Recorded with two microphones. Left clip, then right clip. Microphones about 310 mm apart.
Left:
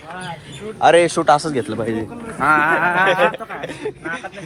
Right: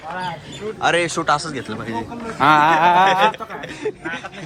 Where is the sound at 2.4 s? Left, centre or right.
Right.